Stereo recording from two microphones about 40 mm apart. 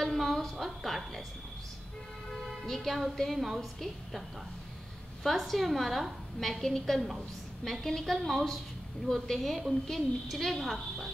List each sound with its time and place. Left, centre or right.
0.0 s a sound: centre
2.4 s vehicle: centre
3.2 s a woman's voice: centre
5.2 s a woman's voice: centre